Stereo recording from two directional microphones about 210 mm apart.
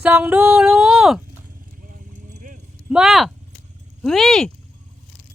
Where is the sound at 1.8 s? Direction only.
40° right (ahead or behind).